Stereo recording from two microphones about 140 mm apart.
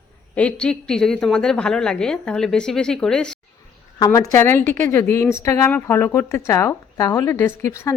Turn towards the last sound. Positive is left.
turn(degrees=20)  # may be behind; listen again after turning